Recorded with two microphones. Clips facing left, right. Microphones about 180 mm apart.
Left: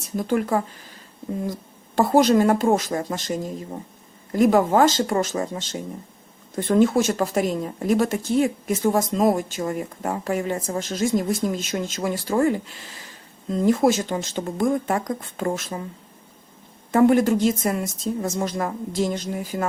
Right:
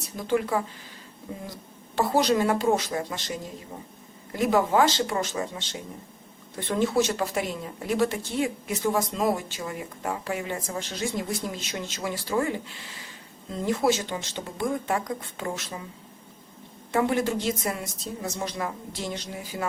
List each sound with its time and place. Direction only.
0.2 s a woman's voice: 50° left (ahead or behind)
2.0 s a woman's voice: 50° left (ahead or behind)
13.7 s a woman's voice: 50° left (ahead or behind)
16.9 s a woman's voice: 50° left (ahead or behind)